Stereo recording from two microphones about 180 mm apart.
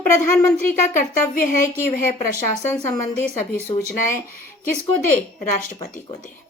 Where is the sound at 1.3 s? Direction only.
50° left (ahead or behind).